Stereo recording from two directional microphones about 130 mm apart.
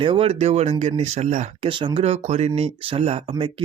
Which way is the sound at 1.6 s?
40° right (ahead or behind).